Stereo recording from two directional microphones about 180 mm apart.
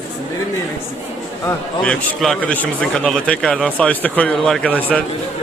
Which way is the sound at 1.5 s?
5° left (ahead or behind).